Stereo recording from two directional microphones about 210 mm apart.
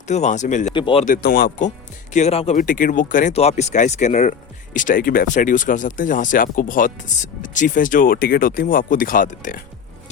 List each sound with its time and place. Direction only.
0.1 s speech: 35° left (ahead or behind)
0.7 s speech: 25° left (ahead or behind)
1.0 s speech: 45° left (ahead or behind)